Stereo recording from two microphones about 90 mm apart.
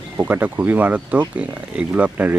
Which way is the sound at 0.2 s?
20° right (ahead or behind).